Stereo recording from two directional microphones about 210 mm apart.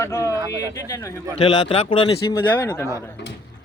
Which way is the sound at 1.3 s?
25° left (ahead or behind).